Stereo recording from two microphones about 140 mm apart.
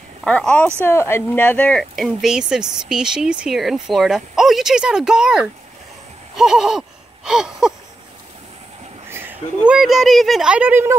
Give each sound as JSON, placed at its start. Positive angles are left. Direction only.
{"t": 0.2, "sound": "speech", "side_deg": 5}
{"t": 9.1, "sound": "a sound", "side_deg": -15}
{"t": 9.7, "sound": "speech", "side_deg": 0}